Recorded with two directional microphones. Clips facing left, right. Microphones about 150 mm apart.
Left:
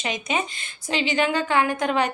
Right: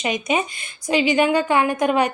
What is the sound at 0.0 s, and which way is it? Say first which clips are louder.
A woman's voice: right 5 dB; 20° right (ahead or behind).